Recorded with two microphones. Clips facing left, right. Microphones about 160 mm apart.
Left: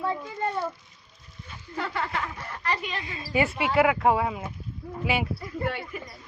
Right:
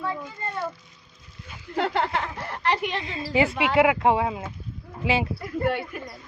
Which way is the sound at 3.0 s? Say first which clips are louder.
Right 3 dB; 25° right (ahead or behind).